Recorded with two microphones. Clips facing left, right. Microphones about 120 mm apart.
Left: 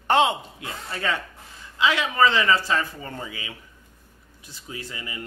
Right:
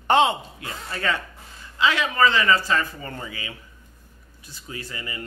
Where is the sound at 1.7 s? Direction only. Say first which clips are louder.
Even; 10° left (ahead or behind).